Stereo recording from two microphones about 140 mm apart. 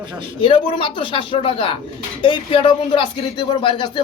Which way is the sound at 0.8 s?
35° left (ahead or behind).